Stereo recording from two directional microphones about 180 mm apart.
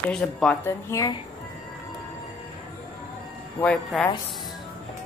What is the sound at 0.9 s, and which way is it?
Speech, 20° left (ahead or behind).